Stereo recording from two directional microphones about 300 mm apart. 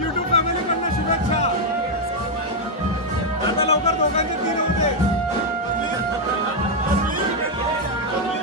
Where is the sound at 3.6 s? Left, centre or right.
Left.